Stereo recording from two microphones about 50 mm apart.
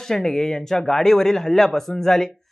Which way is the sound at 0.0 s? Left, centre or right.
Centre.